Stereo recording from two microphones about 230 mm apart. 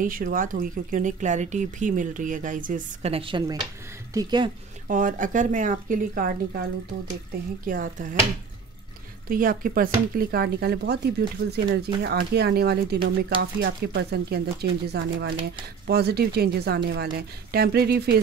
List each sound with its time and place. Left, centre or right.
0.0 s speech: right; by 4.5 s centre
4.8 s speech: right
9.3 s speech: right